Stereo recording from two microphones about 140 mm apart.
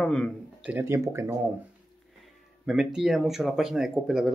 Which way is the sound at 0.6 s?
15° right (ahead or behind).